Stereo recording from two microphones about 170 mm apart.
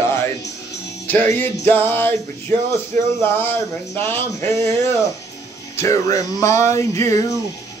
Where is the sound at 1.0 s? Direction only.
10° left (ahead or behind).